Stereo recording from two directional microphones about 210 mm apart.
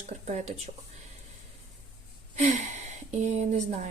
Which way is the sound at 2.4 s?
35° right (ahead or behind).